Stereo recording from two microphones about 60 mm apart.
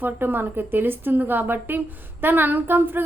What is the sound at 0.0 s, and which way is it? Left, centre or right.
A woman's voice, right.